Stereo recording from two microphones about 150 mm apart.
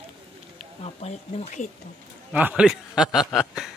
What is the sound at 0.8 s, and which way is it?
Speech, 45° left (ahead or behind).